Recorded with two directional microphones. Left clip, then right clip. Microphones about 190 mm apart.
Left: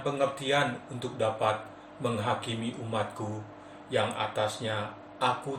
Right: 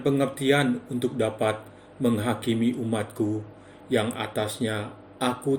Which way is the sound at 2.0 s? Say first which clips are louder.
Right 4 dB; 60° right (ahead or behind).